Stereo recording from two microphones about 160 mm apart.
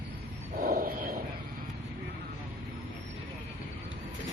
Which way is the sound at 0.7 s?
60° right (ahead or behind).